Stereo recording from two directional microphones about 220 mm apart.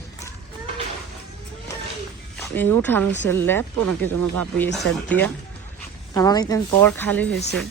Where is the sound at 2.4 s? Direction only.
10° left (ahead or behind).